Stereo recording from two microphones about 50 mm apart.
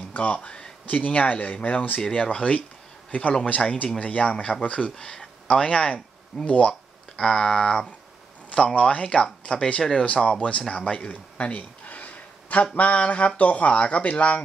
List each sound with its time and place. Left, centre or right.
0.1 s speech: left
4.9 s speech: centre
6.7 s speech: centre
10.7 s a sound: left
12.7 s speech: left